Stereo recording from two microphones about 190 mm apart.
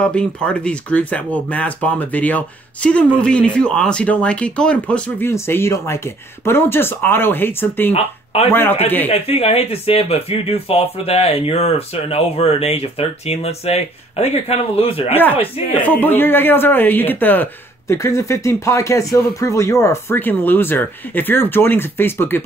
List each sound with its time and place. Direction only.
0.0 s speech: 5° left (ahead or behind)
7.9 s speech: 30° left (ahead or behind)
15.8 s speech: 10° left (ahead or behind)